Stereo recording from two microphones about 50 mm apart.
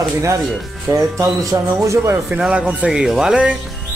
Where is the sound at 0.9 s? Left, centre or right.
Right.